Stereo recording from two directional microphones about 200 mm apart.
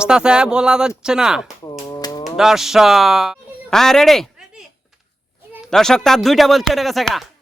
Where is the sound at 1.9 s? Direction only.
20° left (ahead or behind).